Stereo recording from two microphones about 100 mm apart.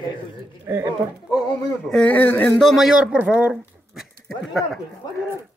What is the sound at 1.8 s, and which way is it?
Speech, 10° left (ahead or behind).